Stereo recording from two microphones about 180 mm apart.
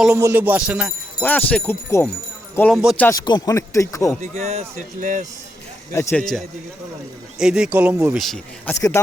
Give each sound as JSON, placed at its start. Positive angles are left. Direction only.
{"t": 0.0, "sound": "music", "side_deg": -10}
{"t": 1.2, "sound": "speech", "side_deg": 10}
{"t": 4.2, "sound": "speech", "side_deg": -35}
{"t": 5.9, "sound": "speech", "side_deg": 15}
{"t": 7.3, "sound": "speech", "side_deg": -5}
{"t": 8.7, "sound": "speech", "side_deg": 15}